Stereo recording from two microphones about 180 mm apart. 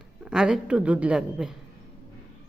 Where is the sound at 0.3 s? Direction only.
5° right (ahead or behind).